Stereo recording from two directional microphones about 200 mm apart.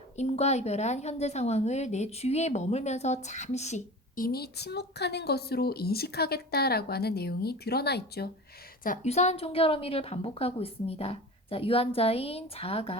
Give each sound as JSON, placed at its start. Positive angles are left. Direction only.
{"t": 0.2, "sound": "speech", "side_deg": 35}
{"t": 8.8, "sound": "a woman's voice", "side_deg": 35}